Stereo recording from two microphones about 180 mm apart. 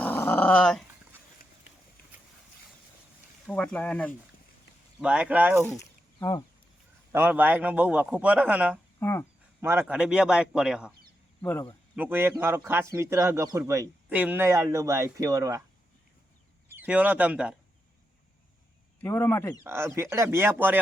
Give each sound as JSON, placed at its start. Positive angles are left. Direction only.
{"t": 0.0, "sound": "dog", "side_deg": 10}
{"t": 3.4, "sound": "speech", "side_deg": 5}
{"t": 4.9, "sound": "a man's voice", "side_deg": -5}
{"t": 5.6, "sound": "a sound", "side_deg": 15}
{"t": 7.1, "sound": "a man's voice", "side_deg": -10}
{"t": 9.0, "sound": "speech", "side_deg": 15}
{"t": 9.6, "sound": "speech", "side_deg": -15}
{"t": 11.9, "sound": "a man's voice", "side_deg": -10}
{"t": 16.7, "sound": "speech", "side_deg": -10}
{"t": 18.9, "sound": "speech", "side_deg": 10}
{"t": 19.6, "sound": "a man's voice", "side_deg": -15}